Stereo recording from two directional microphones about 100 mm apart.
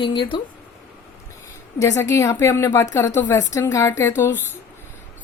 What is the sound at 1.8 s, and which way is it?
A woman's voice, 30° left (ahead or behind).